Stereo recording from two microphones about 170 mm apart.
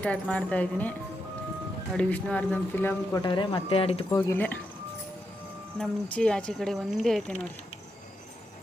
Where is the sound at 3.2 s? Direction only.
30° left (ahead or behind).